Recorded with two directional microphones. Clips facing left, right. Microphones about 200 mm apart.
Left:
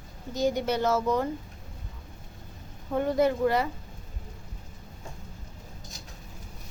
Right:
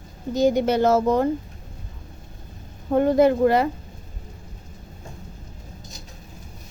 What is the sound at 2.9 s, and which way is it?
Speech, 45° right (ahead or behind).